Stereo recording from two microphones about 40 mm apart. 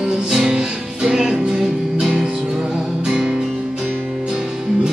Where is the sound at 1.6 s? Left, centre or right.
Centre.